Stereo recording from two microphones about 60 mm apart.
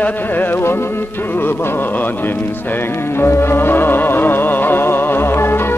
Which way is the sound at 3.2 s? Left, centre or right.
Left.